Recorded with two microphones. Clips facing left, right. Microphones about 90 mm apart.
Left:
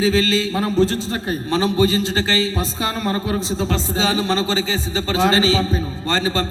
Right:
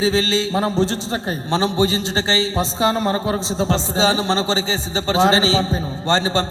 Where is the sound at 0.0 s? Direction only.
25° right (ahead or behind).